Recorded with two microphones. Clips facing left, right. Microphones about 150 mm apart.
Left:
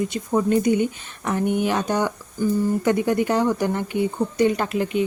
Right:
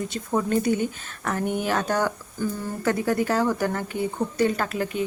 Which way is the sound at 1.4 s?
45° right (ahead or behind).